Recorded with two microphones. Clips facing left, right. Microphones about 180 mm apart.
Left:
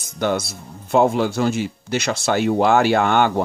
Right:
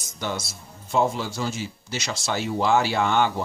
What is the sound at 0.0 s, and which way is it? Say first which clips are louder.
Speech: left 9 dB; 60° left (ahead or behind).